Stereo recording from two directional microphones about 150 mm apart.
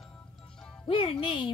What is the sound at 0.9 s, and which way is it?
Speech, 35° left (ahead or behind).